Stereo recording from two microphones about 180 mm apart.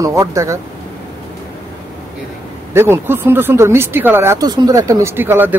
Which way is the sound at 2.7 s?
15° right (ahead or behind).